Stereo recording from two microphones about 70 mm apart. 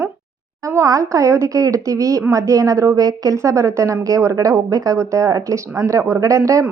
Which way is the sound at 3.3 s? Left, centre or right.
Right.